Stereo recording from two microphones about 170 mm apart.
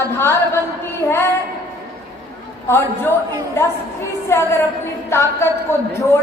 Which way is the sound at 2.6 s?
15° left (ahead or behind).